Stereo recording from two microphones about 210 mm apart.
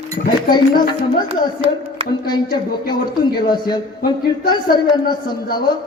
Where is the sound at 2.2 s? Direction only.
20° left (ahead or behind).